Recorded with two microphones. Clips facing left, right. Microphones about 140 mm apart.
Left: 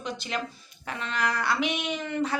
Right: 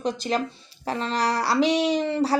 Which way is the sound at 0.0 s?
35° right (ahead or behind).